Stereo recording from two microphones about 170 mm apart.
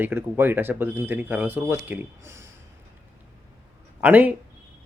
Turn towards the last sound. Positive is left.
turn(degrees=-10)  # may be behind; listen again after turning